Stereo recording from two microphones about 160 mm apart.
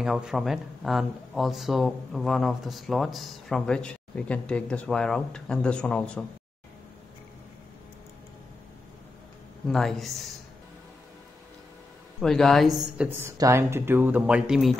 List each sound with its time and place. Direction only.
0.0 s speech: 5° right (ahead or behind)
9.7 s speech: centre (ahead or behind)
12.2 s speech: centre (ahead or behind)
13.4 s speech: 15° right (ahead or behind)